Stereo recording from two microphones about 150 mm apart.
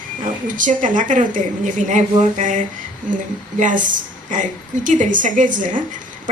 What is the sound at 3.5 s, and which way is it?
A woman's voice, 60° right (ahead or behind).